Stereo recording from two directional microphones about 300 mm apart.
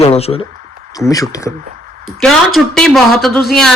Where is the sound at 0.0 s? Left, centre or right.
Left.